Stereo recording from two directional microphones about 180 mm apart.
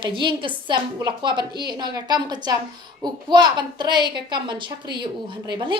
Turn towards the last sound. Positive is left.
turn(degrees=-25)  # may be behind; listen again after turning